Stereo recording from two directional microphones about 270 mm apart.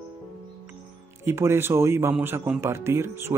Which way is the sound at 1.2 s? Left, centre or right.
Centre.